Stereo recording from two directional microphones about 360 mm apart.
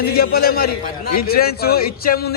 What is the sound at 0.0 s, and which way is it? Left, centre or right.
A man's voice, left.